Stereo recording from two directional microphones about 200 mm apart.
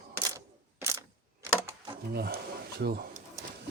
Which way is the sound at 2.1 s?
55° right (ahead or behind).